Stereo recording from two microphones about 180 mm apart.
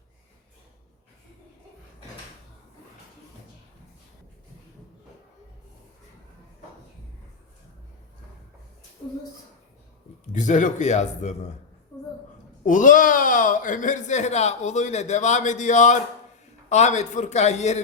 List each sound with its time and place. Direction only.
10.3 s speech: 40° left (ahead or behind)
12.6 s speech: 45° left (ahead or behind)